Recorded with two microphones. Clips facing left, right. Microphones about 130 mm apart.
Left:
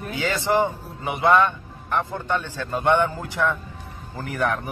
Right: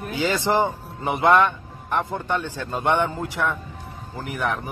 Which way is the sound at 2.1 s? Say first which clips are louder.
Right 1 dB; 15° right (ahead or behind).